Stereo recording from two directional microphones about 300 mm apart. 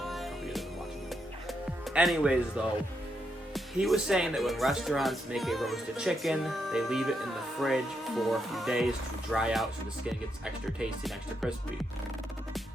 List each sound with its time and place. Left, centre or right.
0.0 s music: centre
3.5 s speech: centre